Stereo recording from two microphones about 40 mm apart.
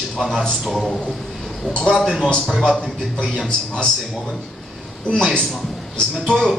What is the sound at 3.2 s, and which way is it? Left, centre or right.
Speech, centre.